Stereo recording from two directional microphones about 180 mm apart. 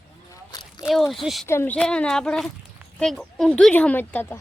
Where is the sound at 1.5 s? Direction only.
10° left (ahead or behind).